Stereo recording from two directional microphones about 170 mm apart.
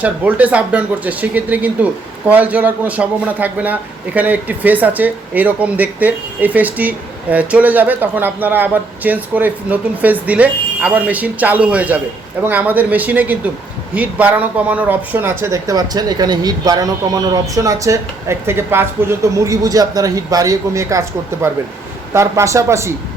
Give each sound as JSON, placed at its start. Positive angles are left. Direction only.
{"t": 0.0, "sound": "speech", "side_deg": -10}